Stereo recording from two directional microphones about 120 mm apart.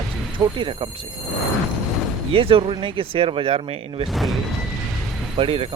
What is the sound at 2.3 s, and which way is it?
Speech, 50° right (ahead or behind).